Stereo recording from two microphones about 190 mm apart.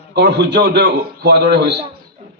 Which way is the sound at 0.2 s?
60° right (ahead or behind).